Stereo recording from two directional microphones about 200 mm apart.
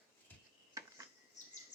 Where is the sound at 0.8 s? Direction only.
15° right (ahead or behind).